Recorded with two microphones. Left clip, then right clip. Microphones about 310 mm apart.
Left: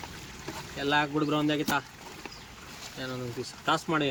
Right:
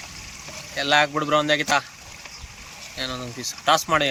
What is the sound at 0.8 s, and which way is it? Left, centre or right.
Speech, centre.